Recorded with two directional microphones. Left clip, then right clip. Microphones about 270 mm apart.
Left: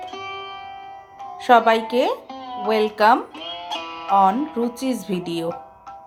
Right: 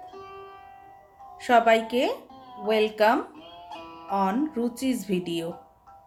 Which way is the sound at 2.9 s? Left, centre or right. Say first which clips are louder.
Left 7 dB; centre.